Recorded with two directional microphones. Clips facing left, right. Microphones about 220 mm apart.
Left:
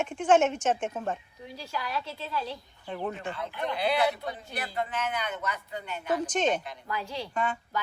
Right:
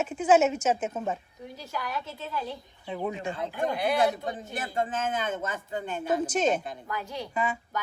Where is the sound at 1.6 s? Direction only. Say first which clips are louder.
Even; 20° right (ahead or behind).